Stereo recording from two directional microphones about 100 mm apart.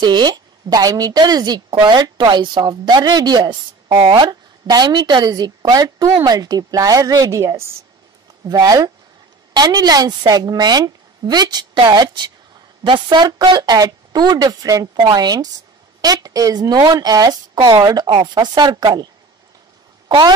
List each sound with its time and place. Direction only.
0.0 s a woman's voice: 45° right (ahead or behind); by 7.7 s 30° right (ahead or behind)
8.5 s a woman's voice: 40° right (ahead or behind)
20.1 s speech: 45° right (ahead or behind)